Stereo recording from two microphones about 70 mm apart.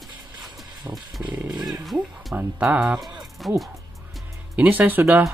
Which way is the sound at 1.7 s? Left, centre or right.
Centre.